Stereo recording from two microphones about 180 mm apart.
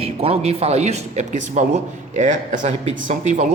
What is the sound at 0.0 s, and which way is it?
Speech, 35° right (ahead or behind).